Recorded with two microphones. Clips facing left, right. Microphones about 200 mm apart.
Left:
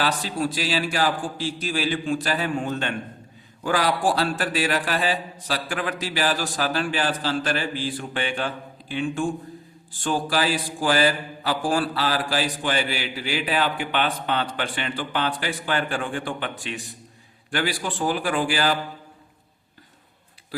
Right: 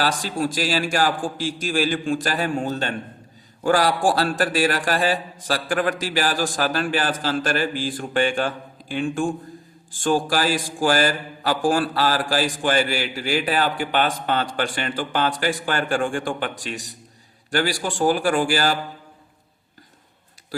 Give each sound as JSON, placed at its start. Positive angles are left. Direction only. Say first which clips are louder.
{"t": 0.2, "sound": "mantra", "louder": "right 2 dB", "side_deg": -45}
{"t": 2.2, "sound": "a man's voice", "louder": "right 2 dB", "side_deg": -45}
{"t": 3.6, "sound": "mantra", "louder": "right 3 dB", "side_deg": -45}